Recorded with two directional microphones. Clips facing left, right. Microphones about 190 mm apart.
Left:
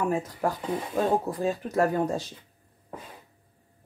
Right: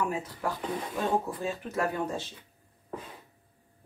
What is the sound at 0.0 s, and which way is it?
Speech, 45° left (ahead or behind).